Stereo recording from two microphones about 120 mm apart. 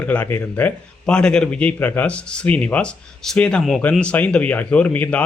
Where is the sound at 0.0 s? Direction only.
15° left (ahead or behind).